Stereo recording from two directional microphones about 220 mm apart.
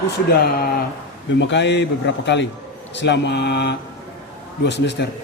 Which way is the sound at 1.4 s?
55° left (ahead or behind).